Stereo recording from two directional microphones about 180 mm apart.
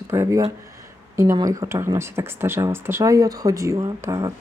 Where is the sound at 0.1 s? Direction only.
15° right (ahead or behind).